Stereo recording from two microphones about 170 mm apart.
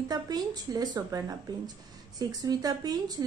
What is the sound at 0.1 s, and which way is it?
Speech, 20° right (ahead or behind).